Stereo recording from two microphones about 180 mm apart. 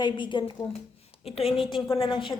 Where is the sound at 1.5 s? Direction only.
25° left (ahead or behind).